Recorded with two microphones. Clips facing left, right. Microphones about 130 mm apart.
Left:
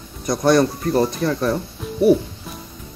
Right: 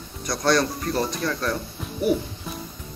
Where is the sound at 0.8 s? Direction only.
25° left (ahead or behind).